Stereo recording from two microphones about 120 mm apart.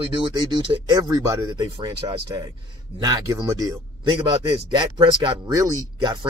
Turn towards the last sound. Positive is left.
turn(degrees=-30)  # may be behind; listen again after turning